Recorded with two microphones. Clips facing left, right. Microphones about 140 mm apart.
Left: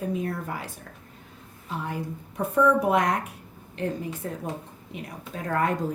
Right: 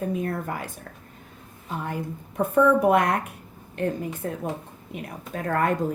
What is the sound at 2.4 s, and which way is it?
Speech, 55° right (ahead or behind).